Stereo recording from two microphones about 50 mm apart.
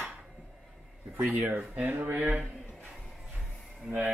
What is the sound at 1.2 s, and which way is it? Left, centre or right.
Speech, right.